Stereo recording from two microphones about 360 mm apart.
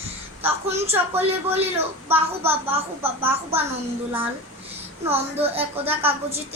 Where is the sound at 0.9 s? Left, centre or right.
Centre.